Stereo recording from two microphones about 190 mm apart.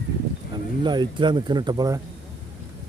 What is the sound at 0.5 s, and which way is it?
Speech, 25° right (ahead or behind).